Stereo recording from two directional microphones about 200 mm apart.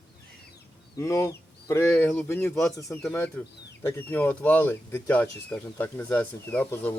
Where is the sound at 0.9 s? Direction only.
15° left (ahead or behind).